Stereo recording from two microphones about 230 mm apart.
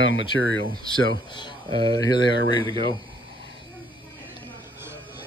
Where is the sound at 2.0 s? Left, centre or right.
Centre.